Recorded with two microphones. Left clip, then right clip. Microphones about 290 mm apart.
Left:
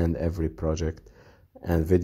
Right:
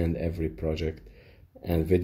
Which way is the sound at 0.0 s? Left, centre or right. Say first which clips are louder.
Left 2 dB; left.